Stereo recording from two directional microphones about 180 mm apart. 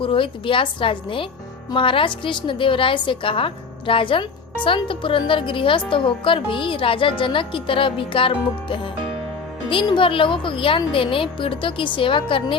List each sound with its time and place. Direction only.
0.0 s a woman's voice: 30° left (ahead or behind)